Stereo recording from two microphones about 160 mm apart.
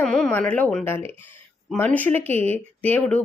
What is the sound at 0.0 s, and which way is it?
Speech, 5° left (ahead or behind).